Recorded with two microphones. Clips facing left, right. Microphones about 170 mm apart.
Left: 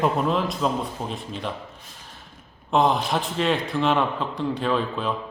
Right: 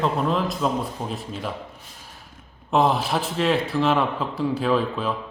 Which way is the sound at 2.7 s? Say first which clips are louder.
Even; 5° right (ahead or behind).